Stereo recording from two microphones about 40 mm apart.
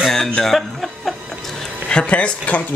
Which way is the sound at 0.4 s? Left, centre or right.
Centre.